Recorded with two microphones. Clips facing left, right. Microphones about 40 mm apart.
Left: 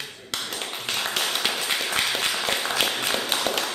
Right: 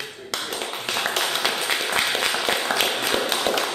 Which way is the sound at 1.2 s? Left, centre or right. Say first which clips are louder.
Right 2 dB; centre.